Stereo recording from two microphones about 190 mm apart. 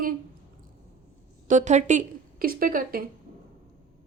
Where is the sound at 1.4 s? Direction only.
40° right (ahead or behind).